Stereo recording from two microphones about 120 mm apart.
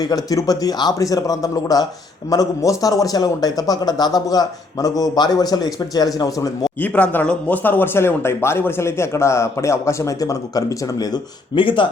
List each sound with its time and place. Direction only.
0.0 s a man's voice: 30° left (ahead or behind)
6.8 s speech: 15° left (ahead or behind); by 11.9 s 45° left (ahead or behind)